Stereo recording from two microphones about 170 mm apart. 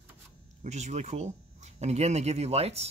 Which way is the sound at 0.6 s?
45° right (ahead or behind).